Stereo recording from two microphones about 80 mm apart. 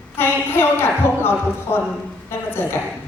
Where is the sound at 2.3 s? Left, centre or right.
Left.